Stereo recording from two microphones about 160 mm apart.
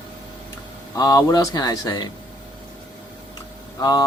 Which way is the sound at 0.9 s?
25° left (ahead or behind).